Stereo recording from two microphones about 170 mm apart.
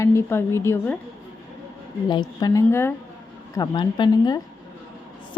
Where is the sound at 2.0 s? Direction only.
25° left (ahead or behind).